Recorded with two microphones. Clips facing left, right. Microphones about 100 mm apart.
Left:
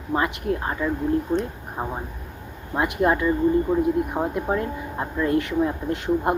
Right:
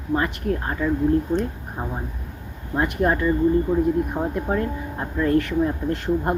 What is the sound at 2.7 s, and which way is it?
Speech, 15° left (ahead or behind).